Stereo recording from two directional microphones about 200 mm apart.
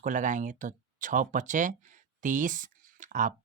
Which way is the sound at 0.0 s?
40° right (ahead or behind).